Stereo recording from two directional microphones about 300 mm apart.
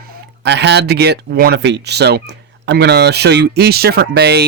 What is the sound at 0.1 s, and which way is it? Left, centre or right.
Speech, right.